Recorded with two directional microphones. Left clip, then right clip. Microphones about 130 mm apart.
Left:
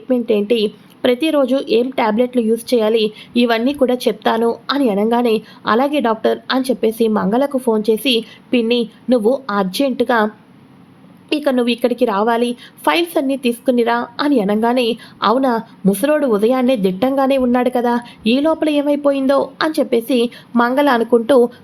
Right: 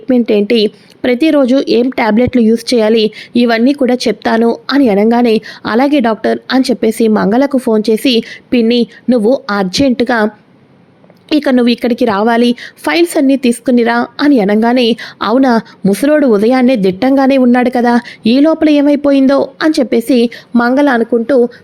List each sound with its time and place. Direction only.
0.1 s a woman's voice: 45° right (ahead or behind); by 21.1 s 25° right (ahead or behind)
21.1 s speech: 10° right (ahead or behind)